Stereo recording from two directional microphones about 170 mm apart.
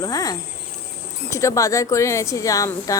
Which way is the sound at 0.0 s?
20° left (ahead or behind).